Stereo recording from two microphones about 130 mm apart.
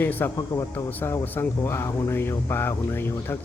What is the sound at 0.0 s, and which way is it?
Speech, 15° left (ahead or behind).